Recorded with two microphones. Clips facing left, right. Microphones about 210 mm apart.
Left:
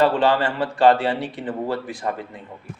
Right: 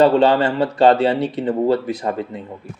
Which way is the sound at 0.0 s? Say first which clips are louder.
Right 5 dB; 25° right (ahead or behind).